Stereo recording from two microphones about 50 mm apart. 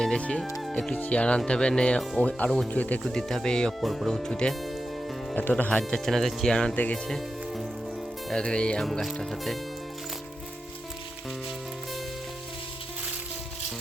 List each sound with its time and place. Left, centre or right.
0.2 s music: left
0.7 s speech: centre
0.9 s music: left
2.6 s speech: left
3.1 s speech: centre
3.8 s speech: centre
4.1 s speech: centre
4.6 s music: centre
5.3 s speech: left
5.9 s speech: centre
6.5 s speech: centre
8.3 s music: centre
8.8 s speech: centre